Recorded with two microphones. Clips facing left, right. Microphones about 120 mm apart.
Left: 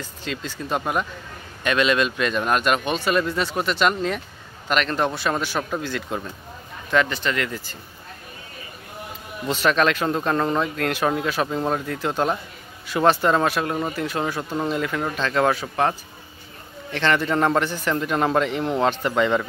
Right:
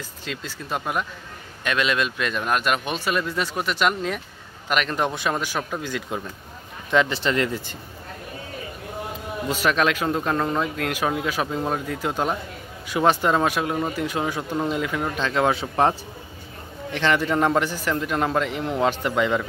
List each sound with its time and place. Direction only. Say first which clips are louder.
0.2 s a man's voice: left 4 dB; 5° right (ahead or behind)
5.6 s a man's voice: left 2 dB; centre (ahead or behind)
6.9 s speech: right 1 dB; 20° right (ahead or behind)
9.5 s a man's voice: left 2 dB; 10° right (ahead or behind)
15.5 s a man's voice: right 2 dB; 30° right (ahead or behind)
16.9 s a man's voice: even; 10° right (ahead or behind)